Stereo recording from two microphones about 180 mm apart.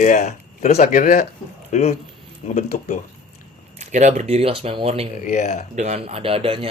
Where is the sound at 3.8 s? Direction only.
40° right (ahead or behind).